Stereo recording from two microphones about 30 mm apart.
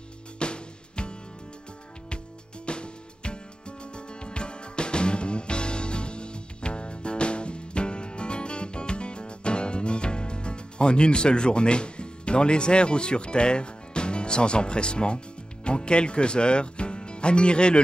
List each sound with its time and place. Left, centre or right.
0.4 s music: left
2.6 s music: left